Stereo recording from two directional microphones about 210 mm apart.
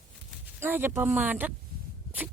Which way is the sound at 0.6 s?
10° right (ahead or behind).